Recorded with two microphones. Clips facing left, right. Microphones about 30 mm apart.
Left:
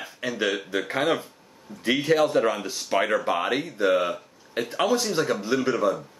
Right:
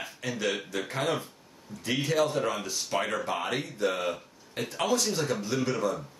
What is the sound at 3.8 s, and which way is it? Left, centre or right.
Speech, centre.